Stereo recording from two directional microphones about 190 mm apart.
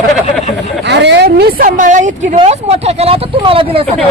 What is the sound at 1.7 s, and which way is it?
A woman's voice, 40° right (ahead or behind).